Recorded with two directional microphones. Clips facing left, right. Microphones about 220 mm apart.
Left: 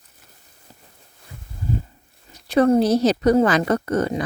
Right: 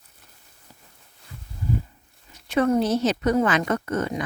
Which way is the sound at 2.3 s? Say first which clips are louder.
Left 5 dB; 35° left (ahead or behind).